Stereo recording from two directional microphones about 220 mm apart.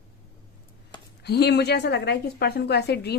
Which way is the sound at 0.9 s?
20° left (ahead or behind).